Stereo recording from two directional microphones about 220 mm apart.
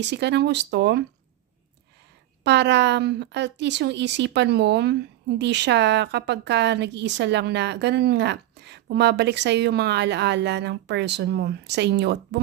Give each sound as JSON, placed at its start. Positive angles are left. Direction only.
{"t": 0.0, "sound": "a woman's voice", "side_deg": -50}
{"t": 2.4, "sound": "a woman's voice", "side_deg": -50}